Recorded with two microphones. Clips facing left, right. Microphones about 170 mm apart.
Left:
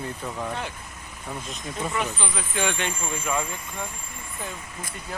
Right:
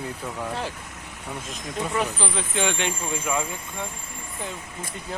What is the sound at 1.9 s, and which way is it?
Speech, 35° right (ahead or behind).